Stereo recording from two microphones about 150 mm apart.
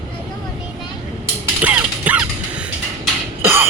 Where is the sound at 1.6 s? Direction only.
10° right (ahead or behind).